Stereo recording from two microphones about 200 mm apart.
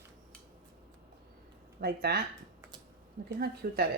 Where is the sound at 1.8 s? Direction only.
50° right (ahead or behind).